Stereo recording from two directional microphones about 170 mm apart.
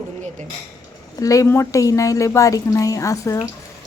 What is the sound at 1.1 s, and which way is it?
A woman's voice, 20° left (ahead or behind).